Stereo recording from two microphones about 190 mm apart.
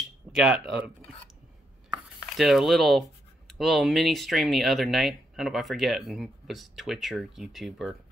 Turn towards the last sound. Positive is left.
turn(degrees=0)  # may be behind; listen again after turning